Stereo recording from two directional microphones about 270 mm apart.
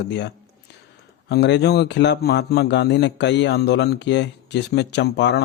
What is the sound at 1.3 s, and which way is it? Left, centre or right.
Speech, left.